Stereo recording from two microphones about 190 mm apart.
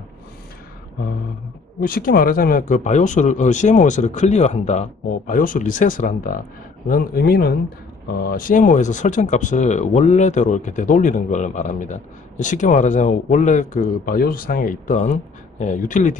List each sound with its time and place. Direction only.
1.8 s speech: 50° left (ahead or behind)